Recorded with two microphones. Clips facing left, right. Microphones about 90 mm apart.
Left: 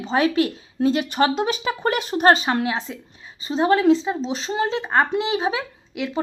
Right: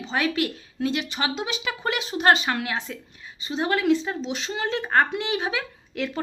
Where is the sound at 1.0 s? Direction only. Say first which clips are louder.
Left 8 dB; 45° left (ahead or behind).